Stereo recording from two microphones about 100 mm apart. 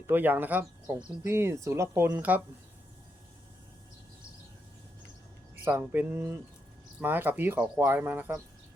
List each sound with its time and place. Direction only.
0.1 s speech: 20° right (ahead or behind)
1.2 s speech: 25° right (ahead or behind)
5.7 s speech: 15° right (ahead or behind)